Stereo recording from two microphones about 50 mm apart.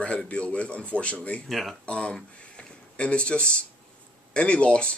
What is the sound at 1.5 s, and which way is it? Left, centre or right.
Speech, centre.